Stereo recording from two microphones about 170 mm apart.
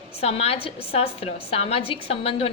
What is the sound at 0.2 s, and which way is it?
A woman's voice, 35° left (ahead or behind).